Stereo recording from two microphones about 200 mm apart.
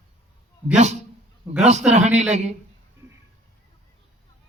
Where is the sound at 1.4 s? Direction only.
Centre (ahead or behind).